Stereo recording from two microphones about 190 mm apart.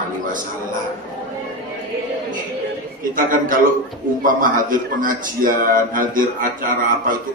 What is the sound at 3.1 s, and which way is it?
A man's voice, 45° right (ahead or behind).